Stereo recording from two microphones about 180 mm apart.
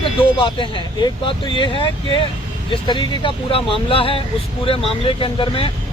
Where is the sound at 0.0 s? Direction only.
30° left (ahead or behind).